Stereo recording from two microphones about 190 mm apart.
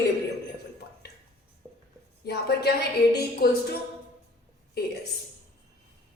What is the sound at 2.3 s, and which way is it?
A woman's voice, 60° left (ahead or behind).